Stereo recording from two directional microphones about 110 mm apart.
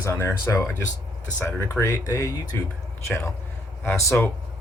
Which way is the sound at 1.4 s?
25° left (ahead or behind).